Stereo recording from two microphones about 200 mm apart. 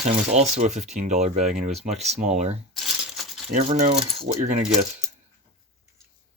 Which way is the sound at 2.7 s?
Centre (ahead or behind).